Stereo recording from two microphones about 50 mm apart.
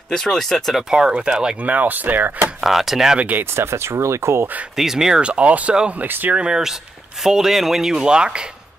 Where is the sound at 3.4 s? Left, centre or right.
Right.